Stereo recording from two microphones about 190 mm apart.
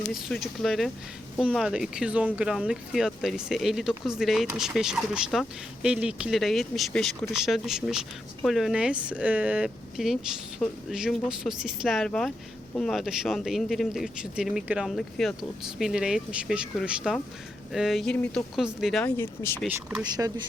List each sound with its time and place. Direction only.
0.1 s speech: centre (ahead or behind)
19.1 s speech: 15° left (ahead or behind)
19.6 s speech: 5° right (ahead or behind)
20.1 s speech: 20° right (ahead or behind)